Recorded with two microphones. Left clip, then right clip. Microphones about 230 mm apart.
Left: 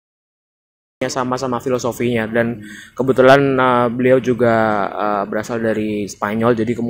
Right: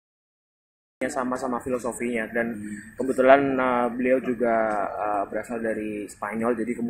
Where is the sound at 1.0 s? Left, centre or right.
Left.